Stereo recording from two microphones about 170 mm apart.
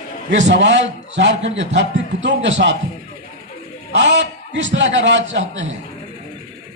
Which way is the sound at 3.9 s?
90° right.